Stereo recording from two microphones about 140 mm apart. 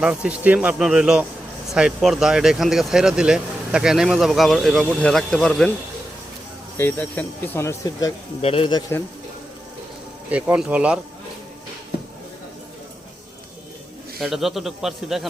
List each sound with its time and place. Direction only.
0.0 s speech: 10° right (ahead or behind)
6.7 s speech: 15° left (ahead or behind)
8.4 s speech: 45° left (ahead or behind)
8.9 s speech: 15° left (ahead or behind)
10.3 s speech: 10° right (ahead or behind)
14.2 s speech: centre (ahead or behind)